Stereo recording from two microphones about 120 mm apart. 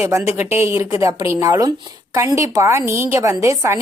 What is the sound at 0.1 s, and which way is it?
A woman's voice, 20° right (ahead or behind).